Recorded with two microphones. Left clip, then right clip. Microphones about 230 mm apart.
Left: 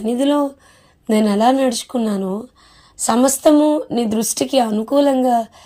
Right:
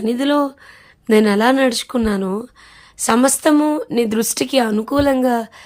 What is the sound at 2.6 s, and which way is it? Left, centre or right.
A woman's voice, centre.